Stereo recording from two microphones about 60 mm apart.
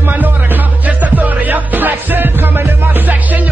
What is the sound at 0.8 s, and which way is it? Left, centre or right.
Music, right.